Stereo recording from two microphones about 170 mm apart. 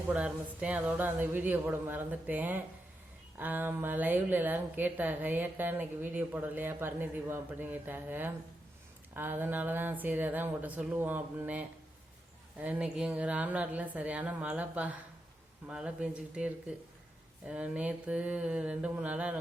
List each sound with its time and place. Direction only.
0.1 s a woman's voice: 5° right (ahead or behind)